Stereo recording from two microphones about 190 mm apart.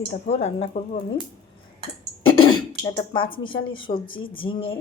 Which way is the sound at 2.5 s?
20° left (ahead or behind).